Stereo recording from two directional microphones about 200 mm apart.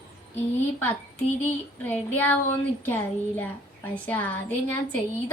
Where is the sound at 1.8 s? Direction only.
10° left (ahead or behind).